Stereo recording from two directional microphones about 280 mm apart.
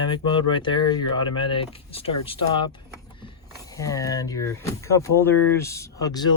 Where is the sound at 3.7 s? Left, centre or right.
Centre.